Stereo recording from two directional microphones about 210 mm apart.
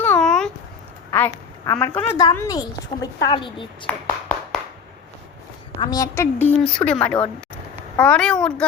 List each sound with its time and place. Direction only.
0.0 s a sound: 5° left (ahead or behind)
1.1 s a woman's voice: 10° left (ahead or behind)
5.8 s a woman's voice: 15° left (ahead or behind)
6.6 s a woman's voice: 5° left (ahead or behind)